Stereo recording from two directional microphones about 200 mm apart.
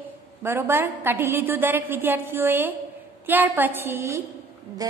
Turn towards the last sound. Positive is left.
turn(degrees=-15)  # may be behind; listen again after turning